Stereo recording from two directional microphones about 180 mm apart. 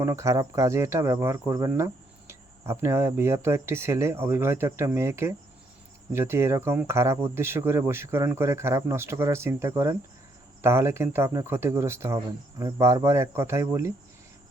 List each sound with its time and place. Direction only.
0.0 s speech: 15° right (ahead or behind)